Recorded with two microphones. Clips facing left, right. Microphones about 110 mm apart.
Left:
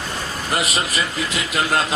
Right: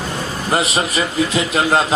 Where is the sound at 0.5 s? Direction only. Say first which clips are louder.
Right 5 dB; 30° right (ahead or behind).